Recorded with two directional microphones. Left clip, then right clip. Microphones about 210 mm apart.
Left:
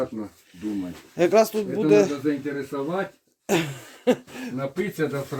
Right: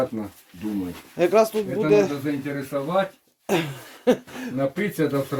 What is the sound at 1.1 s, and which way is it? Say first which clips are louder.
Speech: even; 25° left (ahead or behind).